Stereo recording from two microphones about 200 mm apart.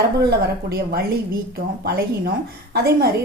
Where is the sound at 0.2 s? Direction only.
50° right (ahead or behind).